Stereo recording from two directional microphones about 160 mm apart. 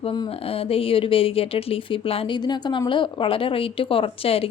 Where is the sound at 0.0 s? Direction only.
35° left (ahead or behind).